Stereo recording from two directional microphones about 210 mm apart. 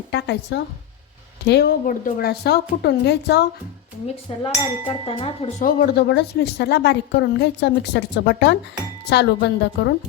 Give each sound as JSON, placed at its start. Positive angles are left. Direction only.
{"t": 0.1, "sound": "a woman's voice", "side_deg": 55}
{"t": 4.3, "sound": "speech", "side_deg": 25}
{"t": 5.6, "sound": "a woman's voice", "side_deg": 50}